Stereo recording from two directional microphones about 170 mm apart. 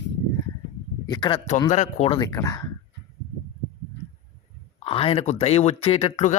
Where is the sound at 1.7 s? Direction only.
45° left (ahead or behind).